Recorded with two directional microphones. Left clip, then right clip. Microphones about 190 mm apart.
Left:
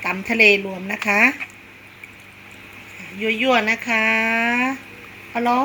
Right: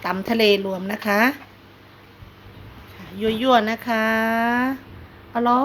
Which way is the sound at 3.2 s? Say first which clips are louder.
Even; 60° right (ahead or behind).